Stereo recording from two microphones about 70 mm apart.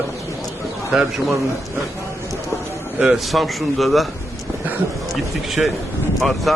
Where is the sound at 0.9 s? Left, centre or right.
Centre.